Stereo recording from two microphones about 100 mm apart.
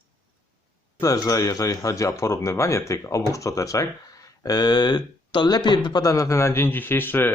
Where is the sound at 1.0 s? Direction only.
35° left (ahead or behind).